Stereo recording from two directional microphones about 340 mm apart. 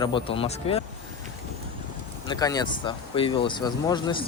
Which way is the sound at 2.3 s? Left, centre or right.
Centre.